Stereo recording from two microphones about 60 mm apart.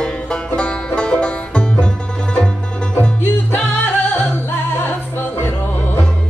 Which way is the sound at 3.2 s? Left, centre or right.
Left.